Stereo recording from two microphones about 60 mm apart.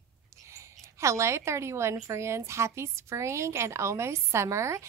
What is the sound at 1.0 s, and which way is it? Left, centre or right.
A woman's voice, right.